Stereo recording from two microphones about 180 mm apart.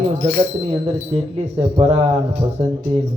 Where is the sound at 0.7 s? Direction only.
35° right (ahead or behind).